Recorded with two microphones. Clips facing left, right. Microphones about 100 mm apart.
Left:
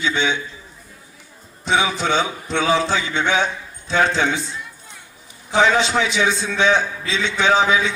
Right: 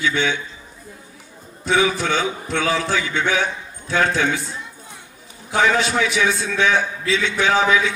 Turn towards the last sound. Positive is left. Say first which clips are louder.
# left 1 dB
turn(degrees=20)  # may be behind; listen again after turning